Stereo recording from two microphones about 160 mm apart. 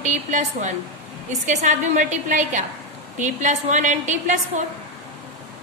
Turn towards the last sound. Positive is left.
turn(degrees=-50)  # may be behind; listen again after turning